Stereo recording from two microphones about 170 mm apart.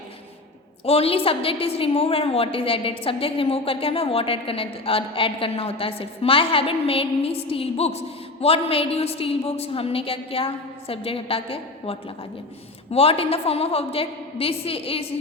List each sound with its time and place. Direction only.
0.9 s a woman's voice: 35° left (ahead or behind)